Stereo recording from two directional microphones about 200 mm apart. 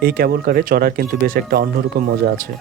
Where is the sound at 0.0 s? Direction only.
50° right (ahead or behind).